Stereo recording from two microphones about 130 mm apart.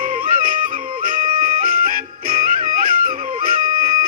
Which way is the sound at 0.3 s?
90° right.